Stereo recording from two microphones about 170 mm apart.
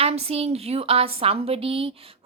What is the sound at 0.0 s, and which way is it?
A woman's voice, 35° right (ahead or behind).